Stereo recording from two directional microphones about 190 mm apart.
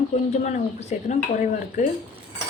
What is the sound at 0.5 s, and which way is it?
A woman's voice, 35° left (ahead or behind).